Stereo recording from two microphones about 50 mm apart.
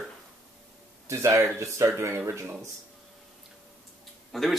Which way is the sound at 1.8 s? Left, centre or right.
Right.